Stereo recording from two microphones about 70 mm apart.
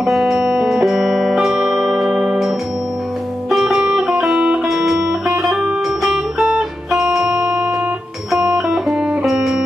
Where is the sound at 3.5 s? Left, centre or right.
Centre.